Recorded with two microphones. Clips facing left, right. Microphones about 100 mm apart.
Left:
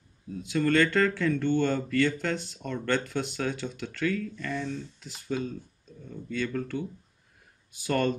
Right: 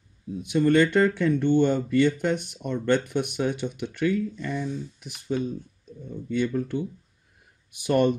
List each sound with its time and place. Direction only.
0.4 s speech: 20° right (ahead or behind)